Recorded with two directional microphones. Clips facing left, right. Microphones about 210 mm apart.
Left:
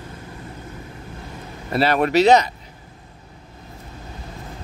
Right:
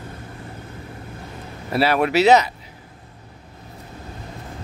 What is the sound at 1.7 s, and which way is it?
Speech, 5° right (ahead or behind).